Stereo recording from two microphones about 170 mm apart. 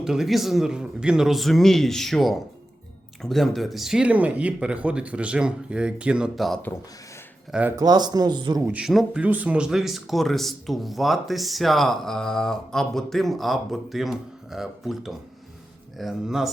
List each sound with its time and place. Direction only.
0.0 s speech: 5° right (ahead or behind)
7.8 s speech: 25° right (ahead or behind)
8.6 s speech: 5° right (ahead or behind)